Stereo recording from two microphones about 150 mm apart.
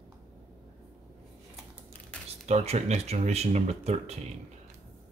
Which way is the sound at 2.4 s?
45° right (ahead or behind).